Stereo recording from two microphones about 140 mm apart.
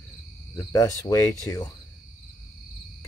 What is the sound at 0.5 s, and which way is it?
Speech, 25° left (ahead or behind).